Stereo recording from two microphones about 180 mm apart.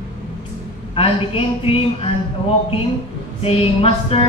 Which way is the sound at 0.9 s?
30° left (ahead or behind).